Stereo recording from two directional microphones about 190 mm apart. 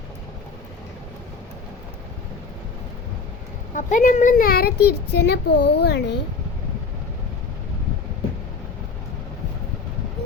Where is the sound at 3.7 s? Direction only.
40° left (ahead or behind); by 6.0 s 60° left (ahead or behind).